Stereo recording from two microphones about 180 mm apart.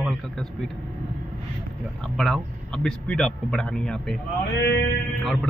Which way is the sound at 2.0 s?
5° left (ahead or behind).